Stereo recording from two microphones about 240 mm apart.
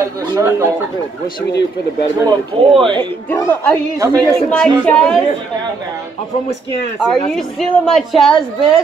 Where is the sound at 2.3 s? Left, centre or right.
Centre.